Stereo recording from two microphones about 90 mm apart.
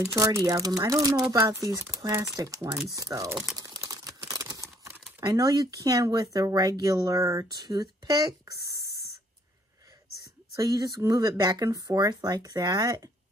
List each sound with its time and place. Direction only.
0.0 s speech: 35° right (ahead or behind)
3.9 s camera: 40° right (ahead or behind)
5.2 s speech: 50° right (ahead or behind)
10.5 s speech: 45° right (ahead or behind)